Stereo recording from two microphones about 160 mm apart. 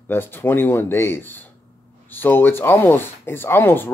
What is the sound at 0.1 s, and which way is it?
Speech, 15° left (ahead or behind).